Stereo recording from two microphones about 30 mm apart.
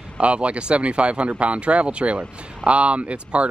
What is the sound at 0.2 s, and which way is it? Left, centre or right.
Speech, right.